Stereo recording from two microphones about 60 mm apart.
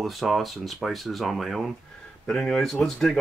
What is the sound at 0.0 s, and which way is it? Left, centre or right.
Speech, centre.